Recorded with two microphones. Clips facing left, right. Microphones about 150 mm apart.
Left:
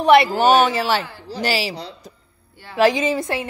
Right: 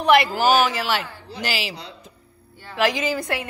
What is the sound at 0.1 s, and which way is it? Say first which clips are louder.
A woman's voice: left 3 dB; 30° left (ahead or behind).